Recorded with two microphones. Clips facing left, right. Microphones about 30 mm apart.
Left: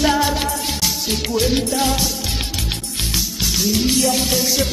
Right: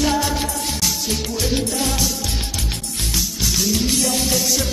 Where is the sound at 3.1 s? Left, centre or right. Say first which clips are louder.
Even; centre.